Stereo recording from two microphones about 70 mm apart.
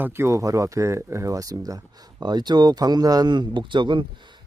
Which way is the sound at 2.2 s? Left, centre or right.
Right.